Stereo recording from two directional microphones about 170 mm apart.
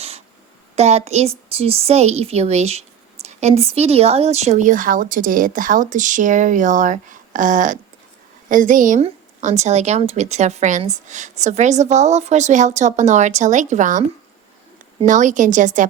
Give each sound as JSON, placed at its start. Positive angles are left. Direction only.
{"t": 0.8, "sound": "a woman's voice", "side_deg": -40}
{"t": 15.0, "sound": "a woman's voice", "side_deg": -45}